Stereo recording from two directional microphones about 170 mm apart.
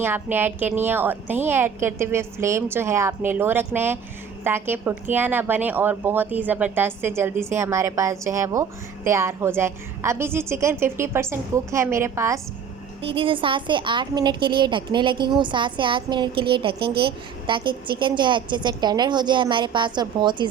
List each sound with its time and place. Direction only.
0.0 s a woman's voice: 10° right (ahead or behind)
13.0 s a woman's voice: 30° right (ahead or behind)